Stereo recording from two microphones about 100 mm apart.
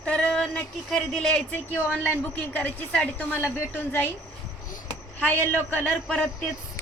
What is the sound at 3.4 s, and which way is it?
Speech, 25° left (ahead or behind).